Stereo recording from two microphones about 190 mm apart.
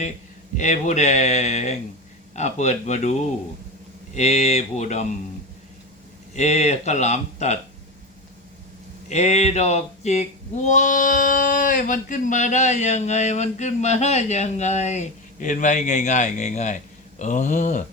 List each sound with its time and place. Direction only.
0.5 s speech: 40° left (ahead or behind)
6.3 s speech: 35° left (ahead or behind)
9.0 s speech: 35° left (ahead or behind)